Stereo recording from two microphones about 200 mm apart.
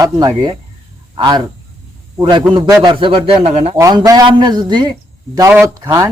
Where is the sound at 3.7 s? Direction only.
20° right (ahead or behind).